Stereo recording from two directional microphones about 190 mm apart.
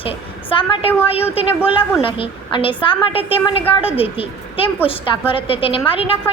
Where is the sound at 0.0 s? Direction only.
30° left (ahead or behind).